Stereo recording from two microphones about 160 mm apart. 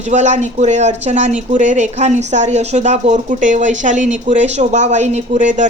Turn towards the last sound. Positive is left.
turn(degrees=-50)  # may be behind; listen again after turning